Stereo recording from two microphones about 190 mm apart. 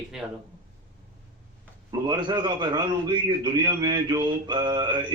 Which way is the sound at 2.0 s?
20° right (ahead or behind).